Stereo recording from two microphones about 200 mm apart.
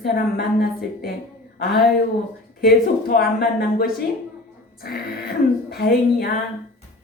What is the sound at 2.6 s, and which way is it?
Speech, 50° left (ahead or behind).